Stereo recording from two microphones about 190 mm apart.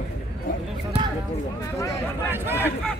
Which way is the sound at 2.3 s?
10° right (ahead or behind).